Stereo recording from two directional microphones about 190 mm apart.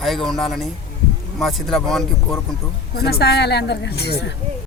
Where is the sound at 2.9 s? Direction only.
55° left (ahead or behind).